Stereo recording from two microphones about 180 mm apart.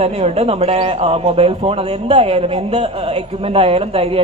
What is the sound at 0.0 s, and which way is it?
A man's voice, 35° right (ahead or behind).